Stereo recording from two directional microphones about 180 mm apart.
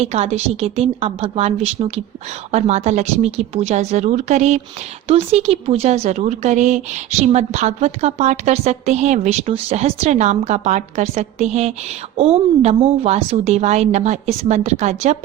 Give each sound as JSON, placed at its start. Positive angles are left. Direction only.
{"t": 0.0, "sound": "a woman's voice", "side_deg": -35}